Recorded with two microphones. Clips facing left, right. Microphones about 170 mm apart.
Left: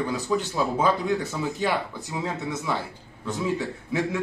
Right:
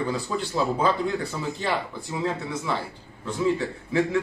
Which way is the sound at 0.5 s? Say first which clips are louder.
Right 3 dB; 15° left (ahead or behind).